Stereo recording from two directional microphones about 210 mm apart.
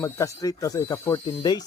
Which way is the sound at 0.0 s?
15° left (ahead or behind).